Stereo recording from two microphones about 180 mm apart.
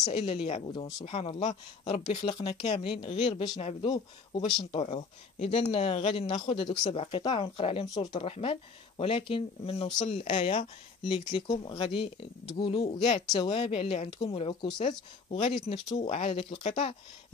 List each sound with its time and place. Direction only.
0.0 s speech: 35° left (ahead or behind)
1.0 s speech: 35° left (ahead or behind)
2.2 s speech: 25° left (ahead or behind)
4.3 s speech: 25° left (ahead or behind)
9.9 s speech: 40° left (ahead or behind)